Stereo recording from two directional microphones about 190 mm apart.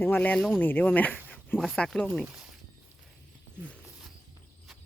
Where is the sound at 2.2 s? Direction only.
5° right (ahead or behind).